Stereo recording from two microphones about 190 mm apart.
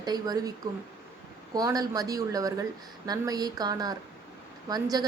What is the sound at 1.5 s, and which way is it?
Speech, 20° right (ahead or behind).